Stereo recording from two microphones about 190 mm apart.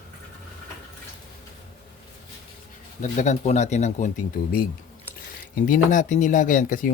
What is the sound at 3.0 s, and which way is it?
Speech, 40° left (ahead or behind).